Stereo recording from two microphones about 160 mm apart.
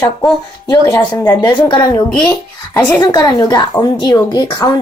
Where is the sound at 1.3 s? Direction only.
25° left (ahead or behind).